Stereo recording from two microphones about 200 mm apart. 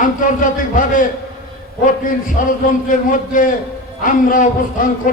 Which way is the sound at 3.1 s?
40° left (ahead or behind).